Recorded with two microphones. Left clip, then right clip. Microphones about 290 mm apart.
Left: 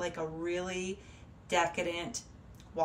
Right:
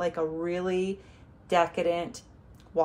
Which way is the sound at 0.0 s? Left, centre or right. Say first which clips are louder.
Right 7 dB; centre.